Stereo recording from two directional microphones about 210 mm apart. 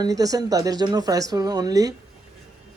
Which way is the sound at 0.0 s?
15° right (ahead or behind).